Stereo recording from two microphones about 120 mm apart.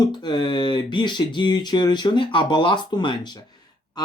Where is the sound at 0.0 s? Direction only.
40° left (ahead or behind).